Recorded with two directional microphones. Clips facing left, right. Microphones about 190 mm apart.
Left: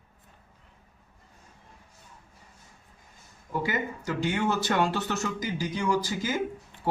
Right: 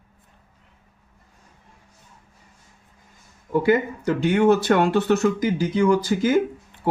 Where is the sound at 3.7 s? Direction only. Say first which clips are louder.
Right 14 dB; 60° right (ahead or behind).